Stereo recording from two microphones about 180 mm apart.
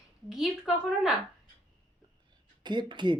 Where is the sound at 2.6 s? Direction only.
25° right (ahead or behind).